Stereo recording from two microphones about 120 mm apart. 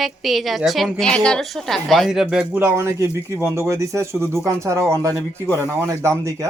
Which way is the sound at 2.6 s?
20° right (ahead or behind).